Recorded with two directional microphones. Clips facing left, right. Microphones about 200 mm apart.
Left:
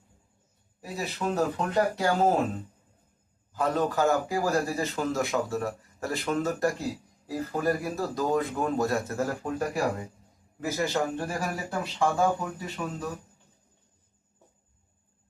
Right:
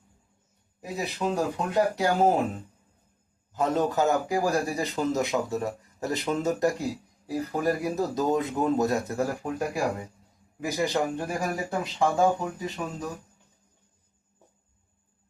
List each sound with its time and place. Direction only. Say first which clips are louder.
0.8 s speech: right 2 dB; 20° right (ahead or behind)
3.5 s a man's voice: right 2 dB; 20° right (ahead or behind)